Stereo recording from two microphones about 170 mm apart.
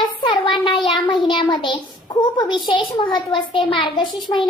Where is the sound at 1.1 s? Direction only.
30° left (ahead or behind).